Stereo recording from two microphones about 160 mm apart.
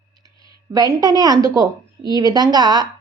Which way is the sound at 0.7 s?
25° right (ahead or behind).